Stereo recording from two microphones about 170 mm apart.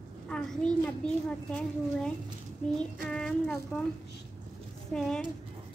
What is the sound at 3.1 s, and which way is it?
Speech, 5° left (ahead or behind).